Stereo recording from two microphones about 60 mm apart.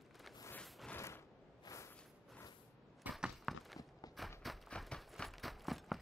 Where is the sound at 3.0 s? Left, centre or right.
Right.